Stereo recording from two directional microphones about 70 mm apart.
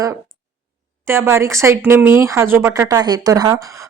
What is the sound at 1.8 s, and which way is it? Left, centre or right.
Speech, right.